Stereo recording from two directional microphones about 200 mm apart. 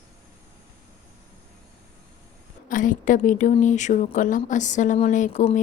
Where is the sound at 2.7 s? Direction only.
40° left (ahead or behind).